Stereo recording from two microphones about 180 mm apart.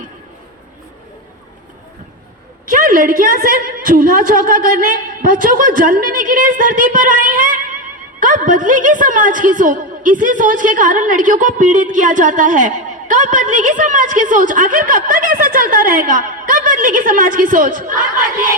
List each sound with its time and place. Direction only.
2.6 s a woman's voice: 50° right (ahead or behind)